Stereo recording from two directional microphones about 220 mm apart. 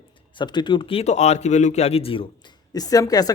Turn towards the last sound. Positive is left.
turn(degrees=15)  # may be behind; listen again after turning